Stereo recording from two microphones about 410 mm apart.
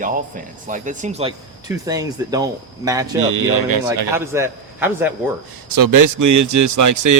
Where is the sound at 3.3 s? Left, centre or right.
Right.